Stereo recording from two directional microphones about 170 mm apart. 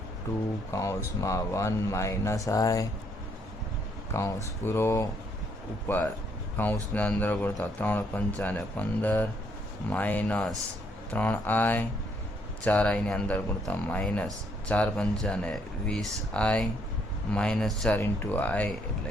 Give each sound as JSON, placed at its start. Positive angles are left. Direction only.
{"t": 0.7, "sound": "speech", "side_deg": 20}
{"t": 4.1, "sound": "speech", "side_deg": 15}